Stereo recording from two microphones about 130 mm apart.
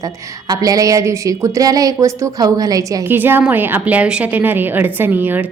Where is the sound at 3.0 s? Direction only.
15° right (ahead or behind).